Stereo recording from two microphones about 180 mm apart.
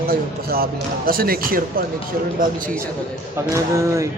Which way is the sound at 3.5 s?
15° right (ahead or behind).